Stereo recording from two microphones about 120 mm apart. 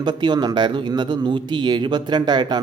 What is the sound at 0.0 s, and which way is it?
Speech, 40° right (ahead or behind).